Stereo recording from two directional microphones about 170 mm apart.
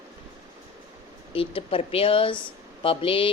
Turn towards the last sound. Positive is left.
turn(degrees=30)  # may be behind; listen again after turning